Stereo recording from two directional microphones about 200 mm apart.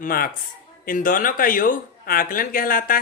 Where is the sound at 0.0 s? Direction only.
45° left (ahead or behind).